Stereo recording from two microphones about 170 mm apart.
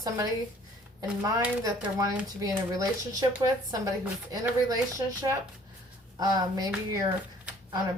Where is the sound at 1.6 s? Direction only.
20° right (ahead or behind).